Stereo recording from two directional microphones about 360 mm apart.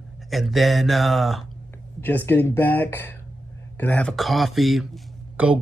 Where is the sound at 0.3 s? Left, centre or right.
Centre.